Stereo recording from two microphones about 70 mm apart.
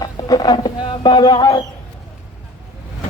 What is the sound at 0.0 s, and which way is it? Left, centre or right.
Speech, left.